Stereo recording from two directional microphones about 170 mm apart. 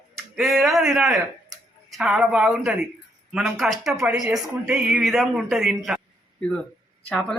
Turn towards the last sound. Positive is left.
turn(degrees=5)  # may be behind; listen again after turning